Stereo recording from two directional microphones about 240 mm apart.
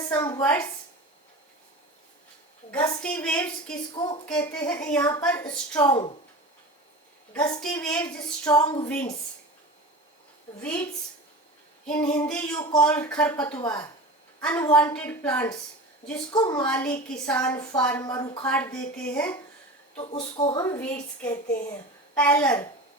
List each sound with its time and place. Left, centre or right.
0.1 s a woman's voice: centre
2.7 s a woman's voice: centre
3.9 s a woman's voice: centre
4.3 s a woman's voice: centre
7.3 s a woman's voice: centre
11.9 s a woman's voice: centre
14.4 s a woman's voice: centre
16.3 s a woman's voice: centre
16.6 s a woman's voice: centre
18.4 s speech: centre
20.0 s a woman's voice: left; by 22.6 s centre